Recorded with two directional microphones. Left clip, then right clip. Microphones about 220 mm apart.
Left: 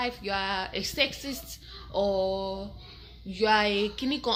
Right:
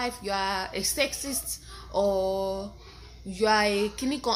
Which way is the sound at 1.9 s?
20° right (ahead or behind).